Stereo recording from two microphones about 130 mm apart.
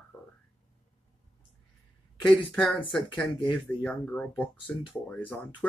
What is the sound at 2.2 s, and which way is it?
Speech, 10° left (ahead or behind).